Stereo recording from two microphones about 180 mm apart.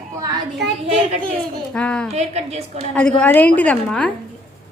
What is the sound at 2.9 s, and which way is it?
A woman's voice, 5° left (ahead or behind).